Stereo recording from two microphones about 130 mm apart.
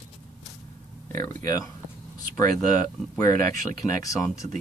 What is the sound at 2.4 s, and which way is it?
Speech, 90° right.